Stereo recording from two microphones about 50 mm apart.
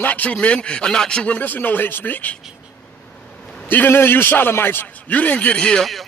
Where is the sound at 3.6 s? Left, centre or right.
Left.